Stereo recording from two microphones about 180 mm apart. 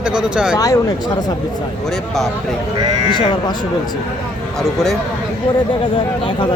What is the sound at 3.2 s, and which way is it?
Speech, 25° left (ahead or behind).